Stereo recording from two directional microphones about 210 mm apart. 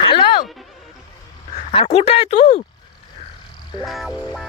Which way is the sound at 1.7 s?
25° left (ahead or behind).